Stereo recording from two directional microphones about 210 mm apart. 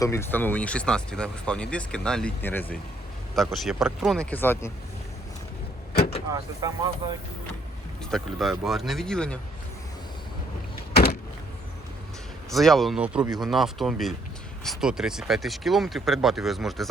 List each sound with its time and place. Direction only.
0.0 s speech: 10° left (ahead or behind)
5.9 s vehicle: 50° left (ahead or behind)
6.3 s speech: 15° right (ahead or behind)
8.1 s speech: centre (ahead or behind)
12.5 s speech: centre (ahead or behind)